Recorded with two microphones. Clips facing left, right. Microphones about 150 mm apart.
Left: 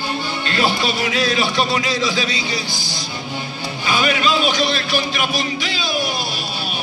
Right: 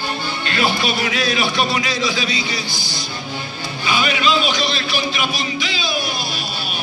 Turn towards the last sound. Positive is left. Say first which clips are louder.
# left 1 dB
turn(degrees=45)  # may be behind; listen again after turning